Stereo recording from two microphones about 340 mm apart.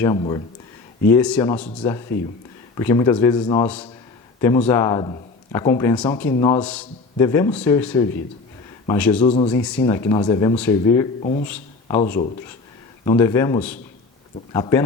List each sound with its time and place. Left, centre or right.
0.0 s speech: centre
2.7 s speech: centre
9.2 s speech: centre
11.2 s speech: left
11.4 s a sound: centre
11.9 s speech: left
13.1 s speech: centre